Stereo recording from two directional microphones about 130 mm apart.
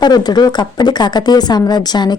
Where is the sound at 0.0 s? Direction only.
30° left (ahead or behind).